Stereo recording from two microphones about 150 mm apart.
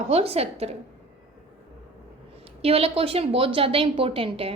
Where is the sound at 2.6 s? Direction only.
40° right (ahead or behind).